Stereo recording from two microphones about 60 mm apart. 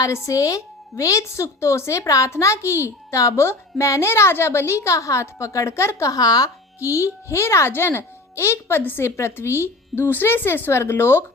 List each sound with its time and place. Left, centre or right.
0.0 s speech: left
6.1 s speech: left
6.7 s speech: left